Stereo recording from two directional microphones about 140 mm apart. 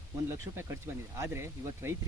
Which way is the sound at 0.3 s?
15° right (ahead or behind).